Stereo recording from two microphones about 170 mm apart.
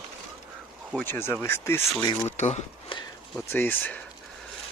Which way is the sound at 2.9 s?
30° left (ahead or behind).